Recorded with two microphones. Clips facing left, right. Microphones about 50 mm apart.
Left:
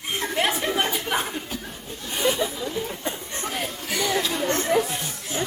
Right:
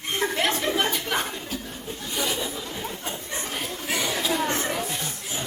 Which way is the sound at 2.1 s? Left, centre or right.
Left.